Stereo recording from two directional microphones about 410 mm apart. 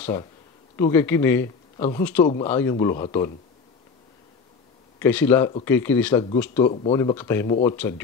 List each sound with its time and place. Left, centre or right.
0.0 s speech: centre
4.9 s speech: centre